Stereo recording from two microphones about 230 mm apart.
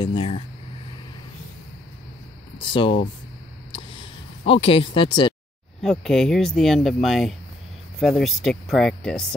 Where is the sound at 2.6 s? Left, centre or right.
Left.